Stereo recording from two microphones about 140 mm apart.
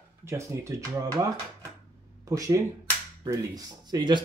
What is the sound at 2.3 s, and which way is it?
Speech, 25° right (ahead or behind).